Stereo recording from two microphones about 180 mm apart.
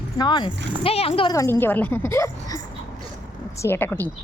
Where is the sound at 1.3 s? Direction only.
15° left (ahead or behind).